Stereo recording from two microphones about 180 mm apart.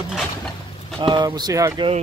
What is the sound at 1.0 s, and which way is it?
Speech, 25° right (ahead or behind).